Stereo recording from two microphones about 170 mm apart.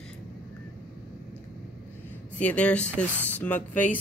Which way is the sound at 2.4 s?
5° left (ahead or behind).